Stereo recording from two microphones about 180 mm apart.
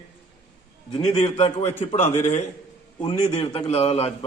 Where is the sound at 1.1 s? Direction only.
35° left (ahead or behind).